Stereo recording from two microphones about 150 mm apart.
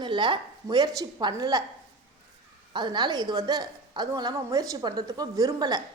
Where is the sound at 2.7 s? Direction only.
30° right (ahead or behind).